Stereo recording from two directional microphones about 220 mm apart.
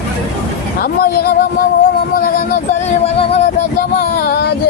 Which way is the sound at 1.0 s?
45° left (ahead or behind).